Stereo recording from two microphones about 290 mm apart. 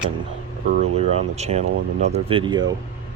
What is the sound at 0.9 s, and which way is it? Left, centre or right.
Speech, right.